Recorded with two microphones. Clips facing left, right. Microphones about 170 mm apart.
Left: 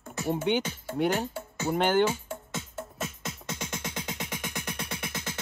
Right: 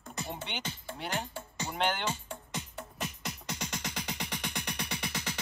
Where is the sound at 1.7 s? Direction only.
50° left (ahead or behind).